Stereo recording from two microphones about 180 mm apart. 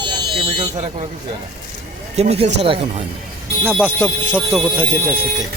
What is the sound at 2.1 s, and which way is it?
Speech, 35° right (ahead or behind).